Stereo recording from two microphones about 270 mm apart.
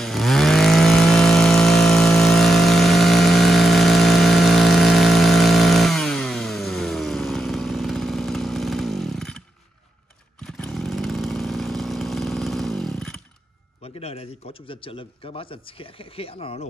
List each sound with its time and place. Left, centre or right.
0.0 s chainsaw: centre
10.4 s chainsaw: centre
13.8 s a man's voice: left